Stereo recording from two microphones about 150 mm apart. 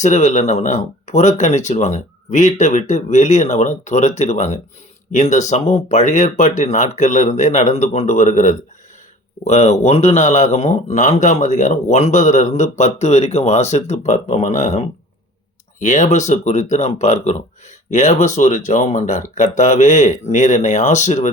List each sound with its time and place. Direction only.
0.0 s a man's voice: 50° left (ahead or behind)